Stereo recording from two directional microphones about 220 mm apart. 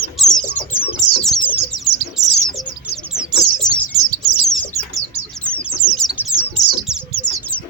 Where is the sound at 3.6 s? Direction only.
35° left (ahead or behind).